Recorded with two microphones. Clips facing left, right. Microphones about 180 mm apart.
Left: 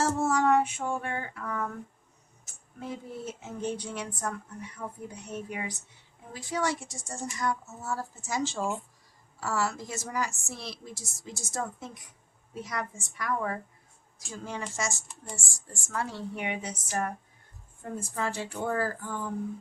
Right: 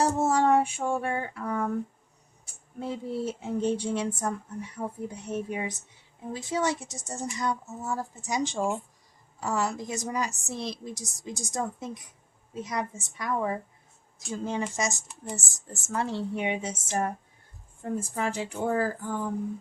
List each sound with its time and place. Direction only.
0.0 s a woman's voice: 20° right (ahead or behind)